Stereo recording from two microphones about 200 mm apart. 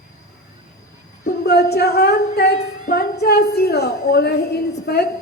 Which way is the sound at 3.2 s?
55° left (ahead or behind).